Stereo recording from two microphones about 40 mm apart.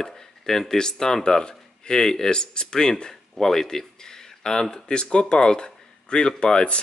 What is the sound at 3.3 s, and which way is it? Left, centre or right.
Speech, centre.